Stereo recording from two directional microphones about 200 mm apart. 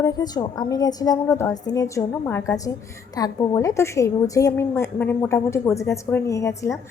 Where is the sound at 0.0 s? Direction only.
20° left (ahead or behind).